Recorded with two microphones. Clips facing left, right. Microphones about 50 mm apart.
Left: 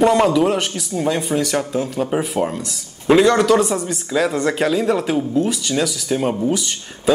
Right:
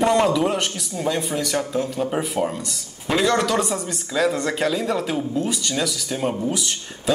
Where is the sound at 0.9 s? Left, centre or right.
Centre.